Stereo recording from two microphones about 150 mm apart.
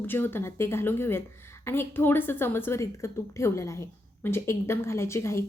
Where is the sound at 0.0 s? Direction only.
15° left (ahead or behind).